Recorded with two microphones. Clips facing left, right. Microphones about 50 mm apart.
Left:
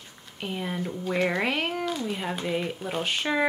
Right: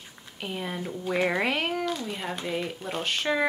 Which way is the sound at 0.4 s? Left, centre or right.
Centre.